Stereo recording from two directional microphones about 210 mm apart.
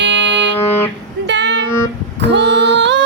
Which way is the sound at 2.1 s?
55° right (ahead or behind).